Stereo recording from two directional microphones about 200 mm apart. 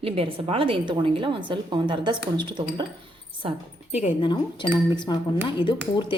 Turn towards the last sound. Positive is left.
turn(degrees=20)  # may be behind; listen again after turning